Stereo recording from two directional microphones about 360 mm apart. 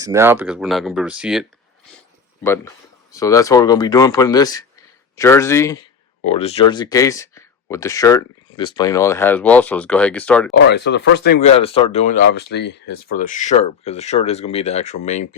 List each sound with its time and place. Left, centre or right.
0.0 s speech: centre
10.5 s speech: left